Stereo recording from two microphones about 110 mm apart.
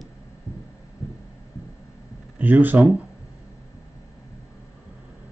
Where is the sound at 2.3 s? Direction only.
15° right (ahead or behind).